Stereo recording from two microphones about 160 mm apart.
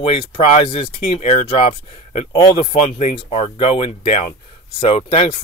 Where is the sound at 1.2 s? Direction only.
45° left (ahead or behind).